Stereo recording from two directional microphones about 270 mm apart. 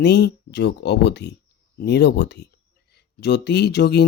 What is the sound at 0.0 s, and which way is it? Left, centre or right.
Speech, left.